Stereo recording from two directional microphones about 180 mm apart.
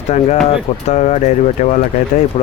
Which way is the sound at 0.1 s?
40° left (ahead or behind).